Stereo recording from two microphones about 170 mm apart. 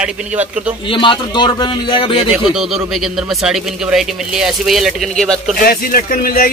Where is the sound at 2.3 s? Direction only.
5° right (ahead or behind).